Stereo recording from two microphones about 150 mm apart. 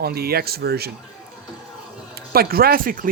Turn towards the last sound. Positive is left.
turn(degrees=-70)  # may be behind; listen again after turning